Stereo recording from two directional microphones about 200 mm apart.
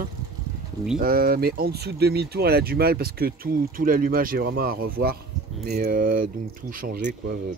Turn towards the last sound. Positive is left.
turn(degrees=-50)  # may be behind; listen again after turning